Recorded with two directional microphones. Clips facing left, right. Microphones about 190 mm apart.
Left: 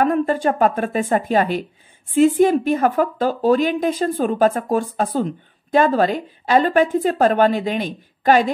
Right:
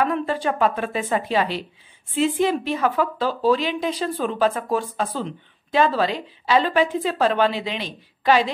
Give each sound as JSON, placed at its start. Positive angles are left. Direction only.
{"t": 0.0, "sound": "a woman's voice", "side_deg": 45}